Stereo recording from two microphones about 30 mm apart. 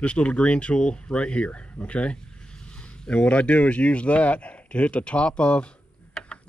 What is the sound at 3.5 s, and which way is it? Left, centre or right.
Speech, left.